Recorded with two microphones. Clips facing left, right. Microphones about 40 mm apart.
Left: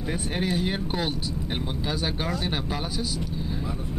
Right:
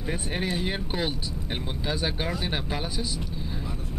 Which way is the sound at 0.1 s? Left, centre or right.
Centre.